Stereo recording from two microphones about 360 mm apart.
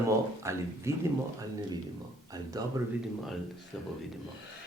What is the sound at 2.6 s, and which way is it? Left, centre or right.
Speech, centre.